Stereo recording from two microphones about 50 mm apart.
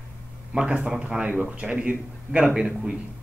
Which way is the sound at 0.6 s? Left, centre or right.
Centre.